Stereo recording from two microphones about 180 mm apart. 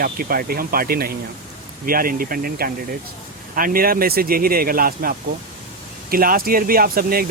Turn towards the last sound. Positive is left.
turn(degrees=-55)  # may be behind; listen again after turning